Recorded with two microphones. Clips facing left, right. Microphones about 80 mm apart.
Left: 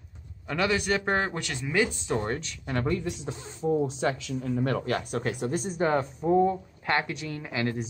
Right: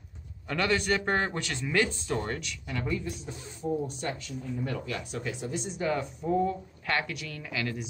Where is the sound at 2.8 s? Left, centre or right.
Left.